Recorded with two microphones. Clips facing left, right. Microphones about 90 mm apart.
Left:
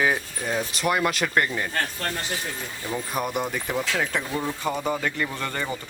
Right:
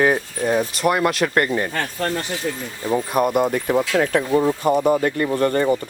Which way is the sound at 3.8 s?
55° right (ahead or behind).